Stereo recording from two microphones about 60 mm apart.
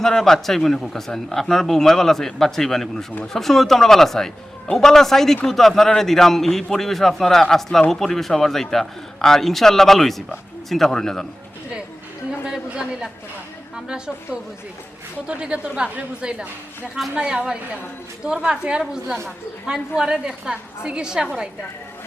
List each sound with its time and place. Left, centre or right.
0.0 s a man's voice: centre
12.5 s a sound: centre
13.7 s a woman's voice: centre
20.0 s a woman's voice: centre